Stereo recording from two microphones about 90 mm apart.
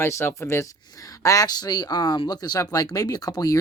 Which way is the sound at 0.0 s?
30° left (ahead or behind).